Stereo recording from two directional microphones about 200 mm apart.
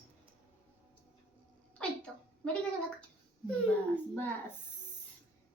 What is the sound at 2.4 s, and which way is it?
Speech, 5° left (ahead or behind).